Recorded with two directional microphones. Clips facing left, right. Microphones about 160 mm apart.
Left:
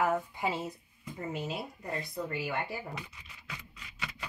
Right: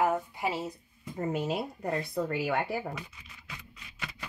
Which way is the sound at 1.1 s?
50° right (ahead or behind).